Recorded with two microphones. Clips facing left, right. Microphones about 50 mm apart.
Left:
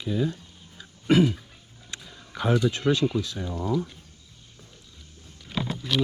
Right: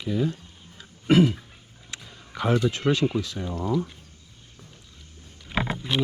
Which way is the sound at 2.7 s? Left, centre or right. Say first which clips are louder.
Even; right.